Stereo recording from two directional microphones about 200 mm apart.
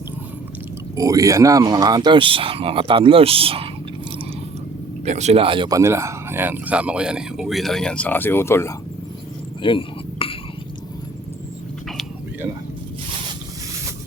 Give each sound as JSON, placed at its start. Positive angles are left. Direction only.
{"t": 0.9, "sound": "speech", "side_deg": -15}
{"t": 5.0, "sound": "speech", "side_deg": -35}
{"t": 9.6, "sound": "a sound", "side_deg": 25}